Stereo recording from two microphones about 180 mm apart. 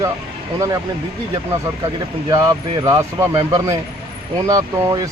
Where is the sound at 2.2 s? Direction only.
20° right (ahead or behind).